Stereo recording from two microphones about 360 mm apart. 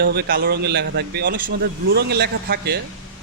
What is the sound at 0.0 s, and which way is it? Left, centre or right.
A man's voice, right.